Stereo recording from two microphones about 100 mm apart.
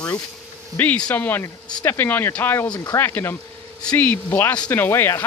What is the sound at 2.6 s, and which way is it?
Speech, 45° left (ahead or behind).